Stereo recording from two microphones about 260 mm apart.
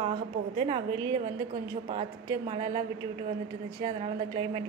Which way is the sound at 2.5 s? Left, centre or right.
Centre.